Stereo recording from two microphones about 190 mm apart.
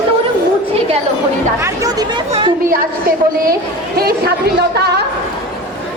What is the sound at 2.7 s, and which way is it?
Speech, 50° right (ahead or behind).